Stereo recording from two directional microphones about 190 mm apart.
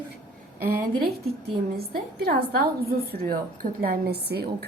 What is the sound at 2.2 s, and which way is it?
A woman's voice, 55° right (ahead or behind).